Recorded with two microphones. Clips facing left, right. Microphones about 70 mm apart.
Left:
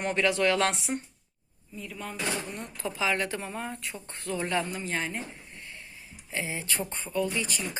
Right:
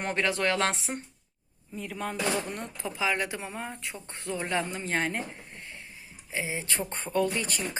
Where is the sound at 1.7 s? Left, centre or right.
Right.